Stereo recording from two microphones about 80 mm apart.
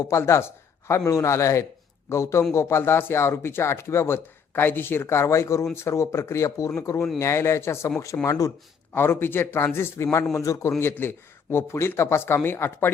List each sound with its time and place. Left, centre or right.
0.0 s speech: left
8.9 s speech: left